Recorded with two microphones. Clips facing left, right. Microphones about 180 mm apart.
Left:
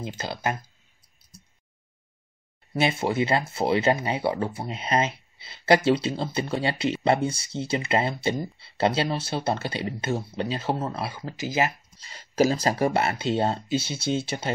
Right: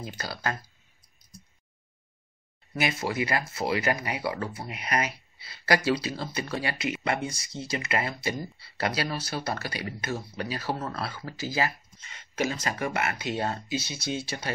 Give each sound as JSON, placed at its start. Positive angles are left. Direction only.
{"t": 0.0, "sound": "speech", "side_deg": 20}
{"t": 2.7, "sound": "speech", "side_deg": 30}
{"t": 12.0, "sound": "speech", "side_deg": 35}